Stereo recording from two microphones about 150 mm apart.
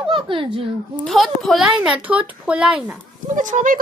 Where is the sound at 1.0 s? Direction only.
Centre (ahead or behind).